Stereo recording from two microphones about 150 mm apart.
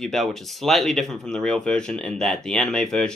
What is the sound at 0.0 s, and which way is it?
Speech, centre (ahead or behind).